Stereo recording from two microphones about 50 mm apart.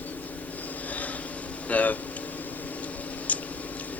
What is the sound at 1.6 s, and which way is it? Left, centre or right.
Speech, left.